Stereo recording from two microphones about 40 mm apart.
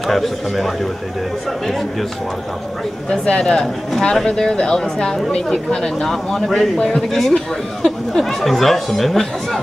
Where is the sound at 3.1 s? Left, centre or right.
Centre.